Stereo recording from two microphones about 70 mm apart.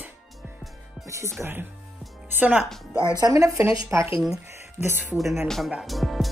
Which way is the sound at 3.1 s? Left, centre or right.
Right.